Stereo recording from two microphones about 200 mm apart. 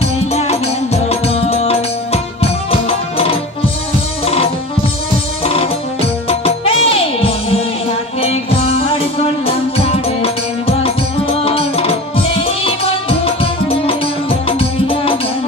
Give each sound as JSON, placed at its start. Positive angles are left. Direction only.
{"t": 0.3, "sound": "music", "side_deg": 30}
{"t": 5.4, "sound": "music", "side_deg": 30}
{"t": 11.4, "sound": "music", "side_deg": 30}